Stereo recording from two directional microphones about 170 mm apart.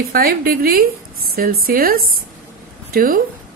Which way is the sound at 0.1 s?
60° right (ahead or behind).